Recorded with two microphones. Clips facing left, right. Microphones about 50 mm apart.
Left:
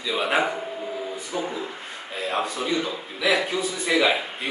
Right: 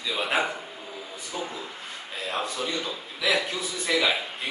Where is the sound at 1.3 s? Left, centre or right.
Centre.